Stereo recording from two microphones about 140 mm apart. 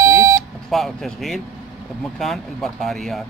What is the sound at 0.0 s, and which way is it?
Beep, 20° right (ahead or behind).